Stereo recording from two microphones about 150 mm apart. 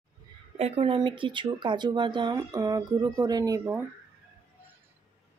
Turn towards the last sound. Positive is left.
turn(degrees=-25)  # may be behind; listen again after turning